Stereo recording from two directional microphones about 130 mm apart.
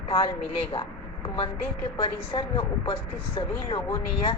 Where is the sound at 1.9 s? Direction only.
45° left (ahead or behind).